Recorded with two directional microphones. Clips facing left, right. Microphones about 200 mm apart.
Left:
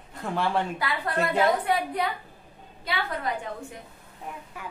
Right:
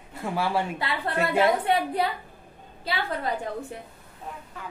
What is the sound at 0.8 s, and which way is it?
A woman's voice, 25° right (ahead or behind).